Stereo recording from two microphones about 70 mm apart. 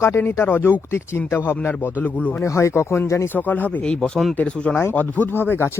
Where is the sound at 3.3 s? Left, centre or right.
Left.